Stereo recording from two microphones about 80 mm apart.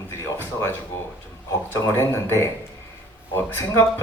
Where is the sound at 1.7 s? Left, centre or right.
Left.